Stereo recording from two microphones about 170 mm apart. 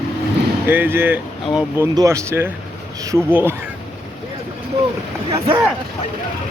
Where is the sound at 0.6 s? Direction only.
10° right (ahead or behind).